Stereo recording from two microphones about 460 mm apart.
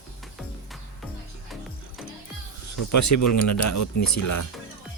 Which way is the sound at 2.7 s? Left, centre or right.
Left.